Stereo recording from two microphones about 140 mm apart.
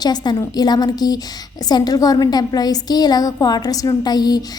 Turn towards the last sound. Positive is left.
turn(degrees=30)  # may be behind; listen again after turning